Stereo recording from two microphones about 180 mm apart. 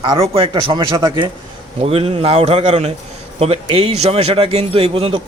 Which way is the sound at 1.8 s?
35° right (ahead or behind).